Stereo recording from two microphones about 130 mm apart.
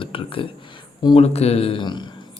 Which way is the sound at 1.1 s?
55° left (ahead or behind).